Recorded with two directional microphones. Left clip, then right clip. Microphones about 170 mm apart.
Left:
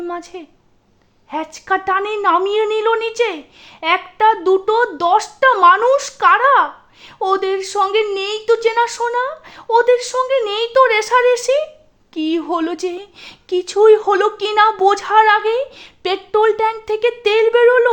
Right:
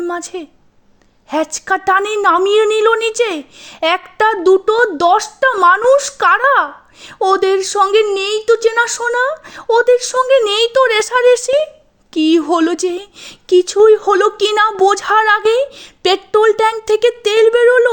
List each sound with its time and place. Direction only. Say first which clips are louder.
0.1 s a woman's voice: right 5 dB; 25° right (ahead or behind)
8.1 s a woman's voice: right 3 dB; 25° right (ahead or behind)